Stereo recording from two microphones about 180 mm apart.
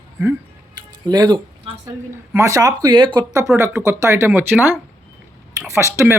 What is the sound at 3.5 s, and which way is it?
Speech, 10° right (ahead or behind).